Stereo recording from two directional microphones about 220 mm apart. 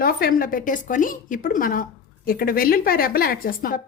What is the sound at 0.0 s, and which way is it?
A woman's voice, 40° left (ahead or behind).